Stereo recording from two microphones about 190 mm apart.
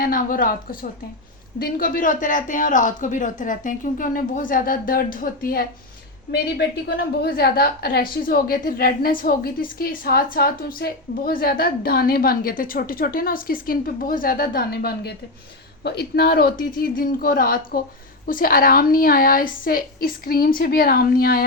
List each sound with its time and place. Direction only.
0.0 s a woman's voice: 50° left (ahead or behind)
6.3 s a woman's voice: 60° left (ahead or behind)